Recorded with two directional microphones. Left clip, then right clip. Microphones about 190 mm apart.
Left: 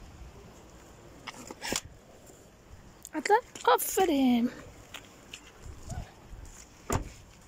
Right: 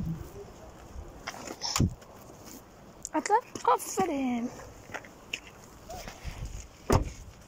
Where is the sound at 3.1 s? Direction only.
25° left (ahead or behind).